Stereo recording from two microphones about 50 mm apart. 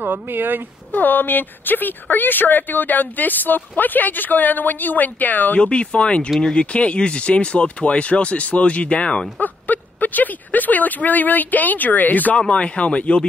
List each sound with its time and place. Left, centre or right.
0.0 s speech: right
0.9 s speech: left
5.6 s speech: left
9.4 s speech: left
12.4 s speech: left